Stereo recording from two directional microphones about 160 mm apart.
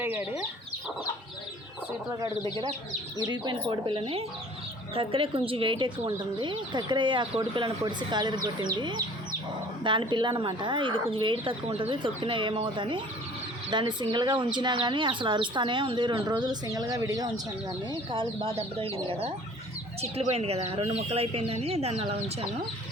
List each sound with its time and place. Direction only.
0.0 s speech: 15° right (ahead or behind)
3.2 s speech: 25° right (ahead or behind)